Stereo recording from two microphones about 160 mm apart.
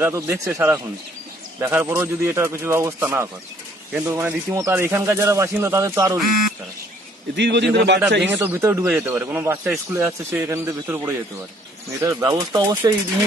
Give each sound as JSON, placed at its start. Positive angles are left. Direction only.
{"t": 0.0, "sound": "speech", "side_deg": -20}
{"t": 7.3, "sound": "a man's voice", "side_deg": -90}
{"t": 8.3, "sound": "speech", "side_deg": -15}